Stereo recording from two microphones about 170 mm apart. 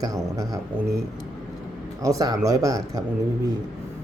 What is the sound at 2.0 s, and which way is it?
Speech, 20° right (ahead or behind).